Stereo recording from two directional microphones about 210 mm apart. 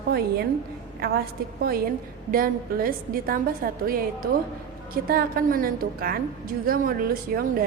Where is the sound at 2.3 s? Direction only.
45° right (ahead or behind).